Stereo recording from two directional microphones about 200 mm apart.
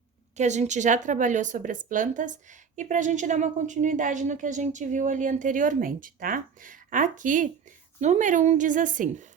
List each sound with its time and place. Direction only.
0.3 s a woman's voice: 35° right (ahead or behind)